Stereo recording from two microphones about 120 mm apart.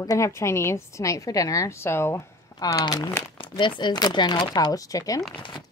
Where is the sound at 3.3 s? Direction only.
40° left (ahead or behind).